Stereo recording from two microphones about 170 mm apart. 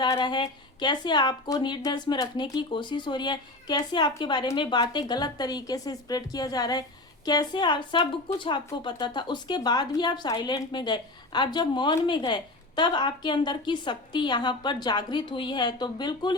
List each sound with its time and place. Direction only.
0.0 s a woman's voice: 25° left (ahead or behind)